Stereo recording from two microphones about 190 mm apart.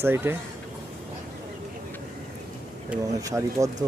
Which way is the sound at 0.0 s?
10° right (ahead or behind).